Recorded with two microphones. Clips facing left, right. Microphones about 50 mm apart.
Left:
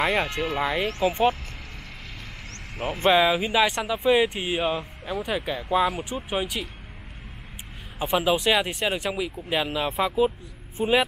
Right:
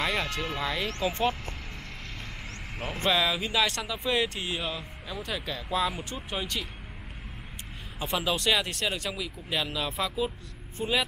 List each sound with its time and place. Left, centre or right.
0.0 s speech: centre
0.8 s speech: centre
3.0 s speech: left
8.0 s speech: centre